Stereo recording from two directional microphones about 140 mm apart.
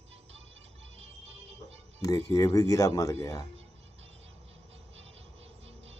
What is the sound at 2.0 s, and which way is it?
Speech, 25° left (ahead or behind).